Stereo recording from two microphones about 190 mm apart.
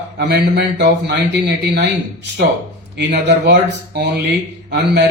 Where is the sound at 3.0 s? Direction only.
65° right (ahead or behind).